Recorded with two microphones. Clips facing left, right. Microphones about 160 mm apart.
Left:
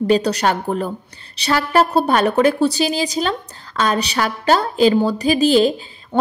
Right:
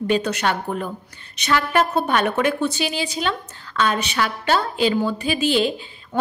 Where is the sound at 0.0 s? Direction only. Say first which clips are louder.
Left 5 dB; 35° left (ahead or behind).